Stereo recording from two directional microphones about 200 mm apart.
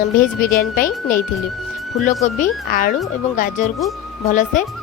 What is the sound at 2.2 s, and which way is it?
Speech, 40° left (ahead or behind).